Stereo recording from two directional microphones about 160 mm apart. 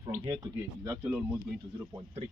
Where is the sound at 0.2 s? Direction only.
20° right (ahead or behind).